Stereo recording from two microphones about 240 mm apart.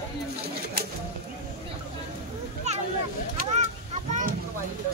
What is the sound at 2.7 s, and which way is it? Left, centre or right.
Vehicle, right.